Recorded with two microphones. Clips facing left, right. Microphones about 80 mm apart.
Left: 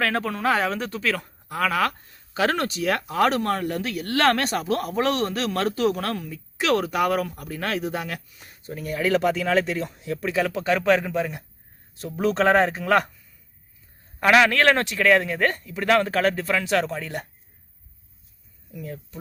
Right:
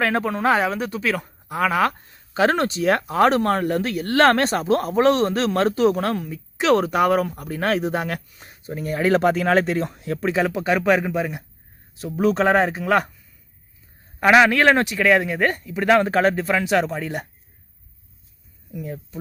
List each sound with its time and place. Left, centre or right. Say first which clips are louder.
0.0 s speech: right 3 dB; centre
0.6 s speech: right 2 dB; centre; by 9.9 s right
9.9 s speech: right 2 dB; right
10.2 s speech: right 3 dB; right; by 13.1 s centre
14.2 s speech: right 3 dB; centre
18.7 s speech: right 4 dB; centre